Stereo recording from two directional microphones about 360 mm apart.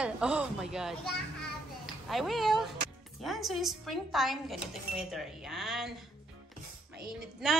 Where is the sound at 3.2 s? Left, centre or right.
Centre.